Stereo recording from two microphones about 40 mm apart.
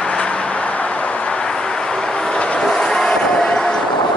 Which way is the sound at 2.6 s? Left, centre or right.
Centre.